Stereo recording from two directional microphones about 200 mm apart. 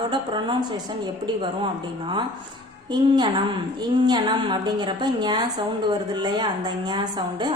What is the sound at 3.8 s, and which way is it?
A woman's voice, 20° right (ahead or behind).